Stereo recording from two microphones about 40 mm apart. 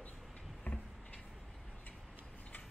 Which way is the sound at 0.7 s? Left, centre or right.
Left.